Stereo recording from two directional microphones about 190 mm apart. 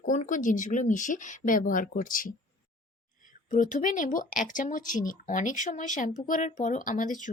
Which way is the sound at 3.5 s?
40° left (ahead or behind).